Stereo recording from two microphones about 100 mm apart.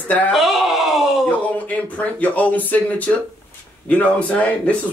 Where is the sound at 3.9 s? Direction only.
15° left (ahead or behind).